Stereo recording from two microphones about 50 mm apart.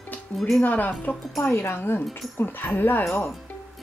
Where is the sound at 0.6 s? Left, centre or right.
Left.